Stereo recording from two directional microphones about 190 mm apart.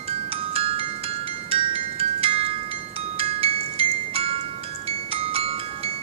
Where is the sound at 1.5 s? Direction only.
30° right (ahead or behind).